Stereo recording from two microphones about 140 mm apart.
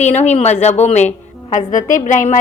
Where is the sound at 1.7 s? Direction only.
65° left (ahead or behind).